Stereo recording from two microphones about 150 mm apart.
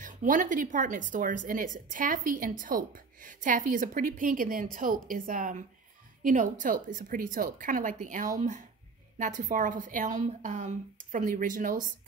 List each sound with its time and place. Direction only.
0.0 s speech: 60° right (ahead or behind)